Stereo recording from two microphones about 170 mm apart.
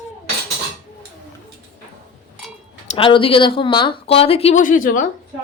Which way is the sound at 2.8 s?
30° left (ahead or behind).